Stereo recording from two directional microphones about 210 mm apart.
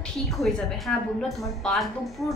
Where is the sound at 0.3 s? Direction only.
Centre (ahead or behind).